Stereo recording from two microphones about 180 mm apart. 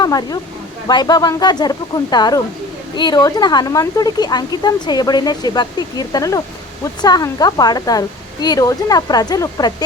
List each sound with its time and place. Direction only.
0.0 s speech: 20° left (ahead or behind)